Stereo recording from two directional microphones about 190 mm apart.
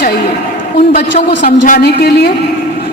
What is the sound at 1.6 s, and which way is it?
Speech, 50° left (ahead or behind).